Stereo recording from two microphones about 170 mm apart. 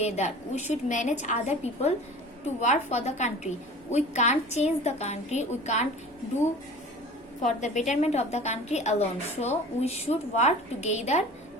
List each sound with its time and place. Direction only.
0.0 s a woman's voice: 40° left (ahead or behind)
7.4 s a woman's voice: 45° left (ahead or behind)